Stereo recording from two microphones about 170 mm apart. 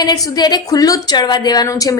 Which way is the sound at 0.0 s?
25° left (ahead or behind).